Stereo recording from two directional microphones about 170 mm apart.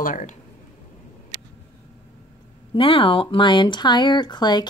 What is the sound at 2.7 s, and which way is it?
Speech, 30° left (ahead or behind).